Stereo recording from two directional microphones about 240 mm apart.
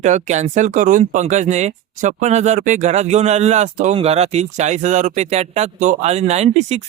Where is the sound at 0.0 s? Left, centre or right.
Right.